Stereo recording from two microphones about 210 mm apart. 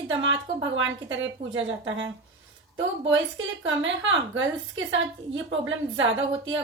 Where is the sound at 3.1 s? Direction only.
60° right (ahead or behind).